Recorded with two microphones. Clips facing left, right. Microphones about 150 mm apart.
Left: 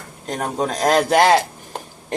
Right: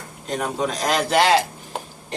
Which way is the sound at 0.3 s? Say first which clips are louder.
Left 1 dB; 40° left (ahead or behind).